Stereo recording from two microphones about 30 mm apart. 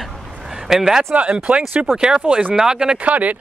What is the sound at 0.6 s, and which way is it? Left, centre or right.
Speech, centre.